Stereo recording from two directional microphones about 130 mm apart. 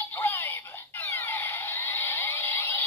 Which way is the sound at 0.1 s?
15° left (ahead or behind).